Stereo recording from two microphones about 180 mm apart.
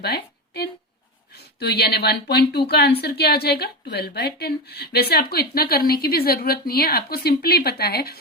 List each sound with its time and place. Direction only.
0.0 s a woman's voice: 65° left (ahead or behind)